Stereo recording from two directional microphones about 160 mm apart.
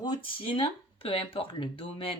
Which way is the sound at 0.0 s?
35° left (ahead or behind).